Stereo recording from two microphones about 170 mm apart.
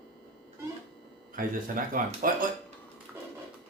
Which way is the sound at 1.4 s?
55° right (ahead or behind).